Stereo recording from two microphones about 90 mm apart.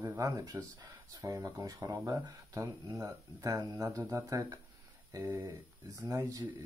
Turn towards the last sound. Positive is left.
turn(degrees=-40)  # may be behind; listen again after turning